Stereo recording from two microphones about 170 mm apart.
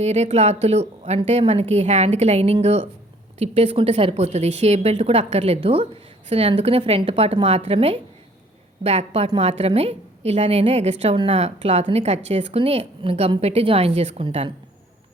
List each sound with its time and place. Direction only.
0.0 s a woman's voice: 40° right (ahead or behind)